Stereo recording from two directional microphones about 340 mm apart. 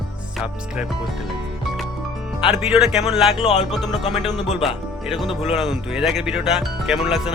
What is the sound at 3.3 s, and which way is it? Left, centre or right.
Speech, centre.